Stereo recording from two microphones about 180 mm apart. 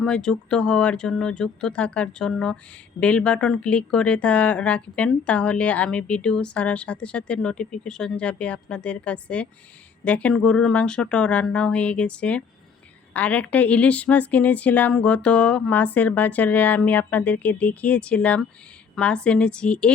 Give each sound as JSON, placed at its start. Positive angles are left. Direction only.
{"t": 0.0, "sound": "speech", "side_deg": 5}